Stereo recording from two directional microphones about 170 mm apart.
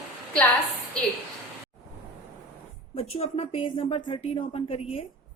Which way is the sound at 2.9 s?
35° left (ahead or behind).